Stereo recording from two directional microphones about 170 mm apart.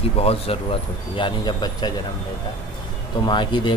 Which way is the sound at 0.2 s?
35° left (ahead or behind).